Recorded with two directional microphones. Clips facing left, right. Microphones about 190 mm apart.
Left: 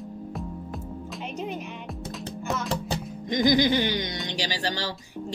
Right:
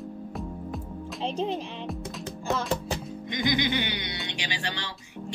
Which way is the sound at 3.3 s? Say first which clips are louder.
Left 6 dB; 40° left (ahead or behind).